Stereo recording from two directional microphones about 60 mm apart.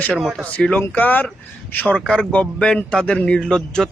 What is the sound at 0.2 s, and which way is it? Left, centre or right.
Speech, centre.